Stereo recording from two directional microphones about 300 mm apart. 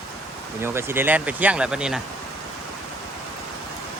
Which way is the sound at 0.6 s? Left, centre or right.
Centre.